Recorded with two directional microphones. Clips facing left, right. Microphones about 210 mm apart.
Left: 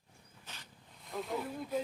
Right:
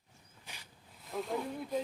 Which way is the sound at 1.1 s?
Centre (ahead or behind).